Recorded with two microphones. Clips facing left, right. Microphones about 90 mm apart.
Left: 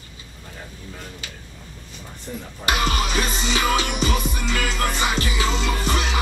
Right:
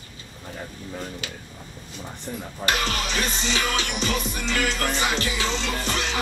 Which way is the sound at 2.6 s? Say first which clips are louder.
Left 3 dB; 15° left (ahead or behind).